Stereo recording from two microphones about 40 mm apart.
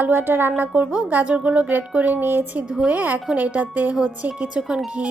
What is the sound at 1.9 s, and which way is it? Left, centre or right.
A woman's voice, right.